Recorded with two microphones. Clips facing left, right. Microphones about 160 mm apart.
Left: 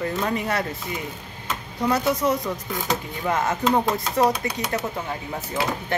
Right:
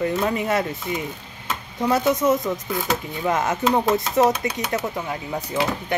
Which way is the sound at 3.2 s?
20° right (ahead or behind).